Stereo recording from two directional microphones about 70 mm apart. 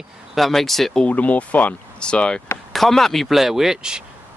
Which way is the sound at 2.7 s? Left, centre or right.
Centre.